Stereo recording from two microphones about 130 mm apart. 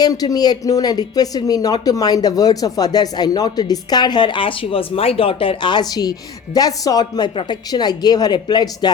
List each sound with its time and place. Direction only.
0.0 s speech: 25° left (ahead or behind)